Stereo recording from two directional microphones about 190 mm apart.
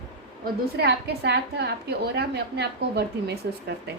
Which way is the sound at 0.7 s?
60° right (ahead or behind).